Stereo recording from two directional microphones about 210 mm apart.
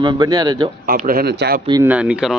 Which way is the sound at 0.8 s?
40° right (ahead or behind).